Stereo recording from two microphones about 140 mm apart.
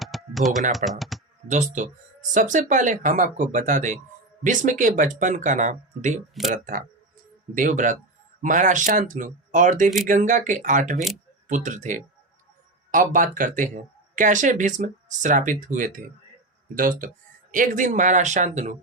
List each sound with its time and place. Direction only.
0.0 s typing: centre (ahead or behind)
0.9 s speech: centre (ahead or behind)
1.5 s speech: 60° right (ahead or behind)
6.5 s speech: 80° right
16.7 s speech: 75° right (ahead or behind); by 18.8 s 60° right (ahead or behind)